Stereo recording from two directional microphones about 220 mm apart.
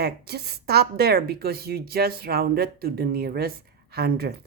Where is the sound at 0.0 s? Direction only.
45° right (ahead or behind).